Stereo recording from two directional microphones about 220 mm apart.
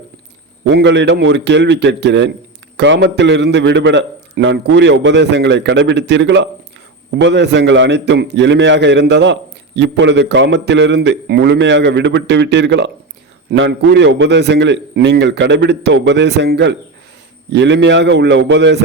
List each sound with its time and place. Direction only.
0.6 s a man's voice: 55° right (ahead or behind)